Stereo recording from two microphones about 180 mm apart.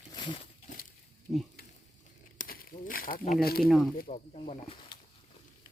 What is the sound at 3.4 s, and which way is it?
Speech, 60° left (ahead or behind).